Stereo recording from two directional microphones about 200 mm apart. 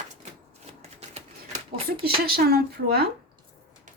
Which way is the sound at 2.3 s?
50° right (ahead or behind).